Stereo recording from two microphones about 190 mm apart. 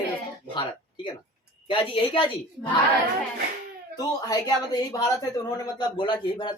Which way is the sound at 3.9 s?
20° left (ahead or behind).